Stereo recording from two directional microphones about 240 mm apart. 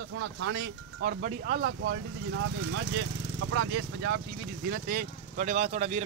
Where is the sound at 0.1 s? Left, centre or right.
Right.